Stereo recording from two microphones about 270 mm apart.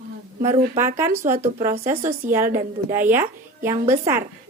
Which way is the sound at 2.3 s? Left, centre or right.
Centre.